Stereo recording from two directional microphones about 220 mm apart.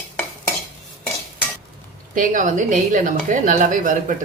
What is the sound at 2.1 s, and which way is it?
A woman's voice, 40° right (ahead or behind).